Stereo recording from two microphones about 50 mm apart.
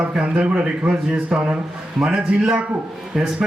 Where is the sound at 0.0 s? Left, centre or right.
Right.